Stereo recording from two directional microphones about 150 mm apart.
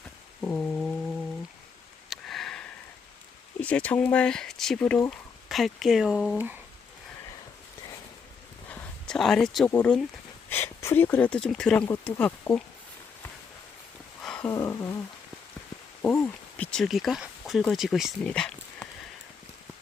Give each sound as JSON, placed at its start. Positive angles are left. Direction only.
{"t": 0.4, "sound": "a sound", "side_deg": 5}
{"t": 2.0, "sound": "sniff", "side_deg": 0}
{"t": 3.6, "sound": "speech", "side_deg": 10}
{"t": 8.7, "sound": "a sound", "side_deg": 5}
{"t": 9.6, "sound": "speech", "side_deg": 10}
{"t": 14.2, "sound": "a sound", "side_deg": 5}
{"t": 14.5, "sound": "humming", "side_deg": 20}
{"t": 16.0, "sound": "speech", "side_deg": 15}
{"t": 18.2, "sound": "dog", "side_deg": 5}